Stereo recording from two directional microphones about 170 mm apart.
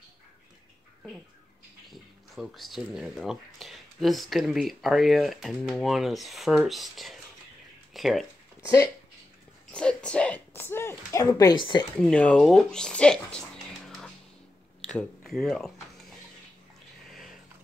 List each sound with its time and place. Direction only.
1.9 s speech: centre (ahead or behind)
8.6 s speech: 20° left (ahead or behind)
9.7 s speech: 5° left (ahead or behind); by 11.8 s 25° left (ahead or behind)
12.0 s speech: 5° left (ahead or behind)
13.8 s a sound: centre (ahead or behind)
14.9 s speech: 5° left (ahead or behind)